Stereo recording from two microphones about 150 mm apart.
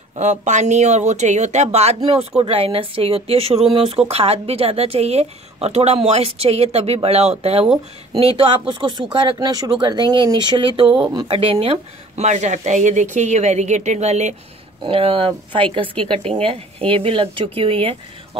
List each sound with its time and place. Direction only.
0.2 s speech: 50° right (ahead or behind)
7.6 s speech: 5° right (ahead or behind)
8.2 s speech: 40° right (ahead or behind)
14.8 s speech: 40° right (ahead or behind)